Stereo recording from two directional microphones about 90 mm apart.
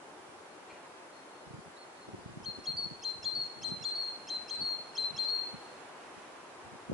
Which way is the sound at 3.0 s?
Centre (ahead or behind).